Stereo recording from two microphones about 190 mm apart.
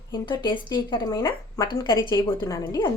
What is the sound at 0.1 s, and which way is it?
Speech, 25° left (ahead or behind).